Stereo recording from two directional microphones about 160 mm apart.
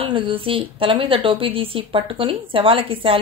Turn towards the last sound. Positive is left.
turn(degrees=-35)  # may be behind; listen again after turning